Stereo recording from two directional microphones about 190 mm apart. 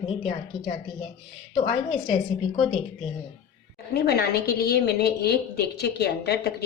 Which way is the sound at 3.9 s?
55° left (ahead or behind).